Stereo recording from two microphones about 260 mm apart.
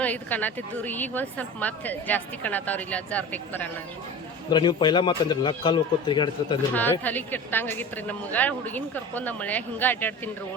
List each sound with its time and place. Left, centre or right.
0.0 s a woman's voice: centre
4.5 s a woman's voice: centre
6.7 s a woman's voice: centre